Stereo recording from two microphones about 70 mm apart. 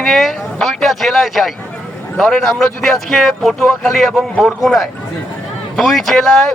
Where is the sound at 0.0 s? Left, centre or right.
Centre.